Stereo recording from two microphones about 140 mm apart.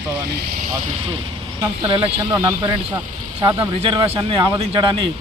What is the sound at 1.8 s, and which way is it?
Speech, 35° right (ahead or behind).